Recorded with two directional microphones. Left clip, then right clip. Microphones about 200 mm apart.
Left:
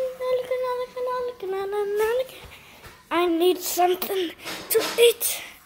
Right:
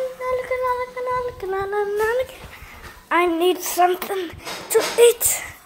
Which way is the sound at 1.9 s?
15° left (ahead or behind).